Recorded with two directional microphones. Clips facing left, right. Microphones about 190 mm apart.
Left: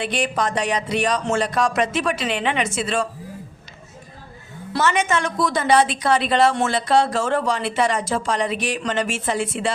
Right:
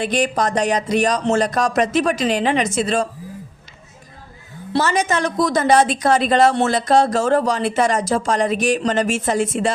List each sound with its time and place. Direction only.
0.0 s speech: 40° right (ahead or behind)
4.7 s a woman's voice: 35° right (ahead or behind)